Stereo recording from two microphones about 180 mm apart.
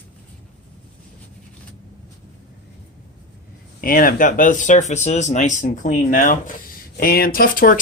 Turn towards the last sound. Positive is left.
turn(degrees=50)  # may be behind; listen again after turning